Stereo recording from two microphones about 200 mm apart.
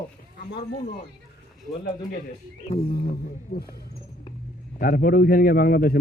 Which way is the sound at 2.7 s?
50° left (ahead or behind).